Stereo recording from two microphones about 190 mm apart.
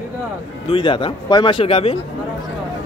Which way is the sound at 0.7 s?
25° left (ahead or behind).